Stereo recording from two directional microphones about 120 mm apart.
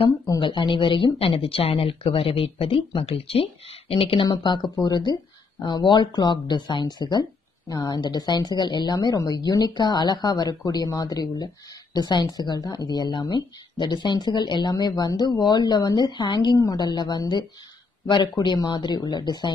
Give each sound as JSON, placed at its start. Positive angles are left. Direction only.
{"t": 0.4, "sound": "speech", "side_deg": 45}
{"t": 4.3, "sound": "speech", "side_deg": 40}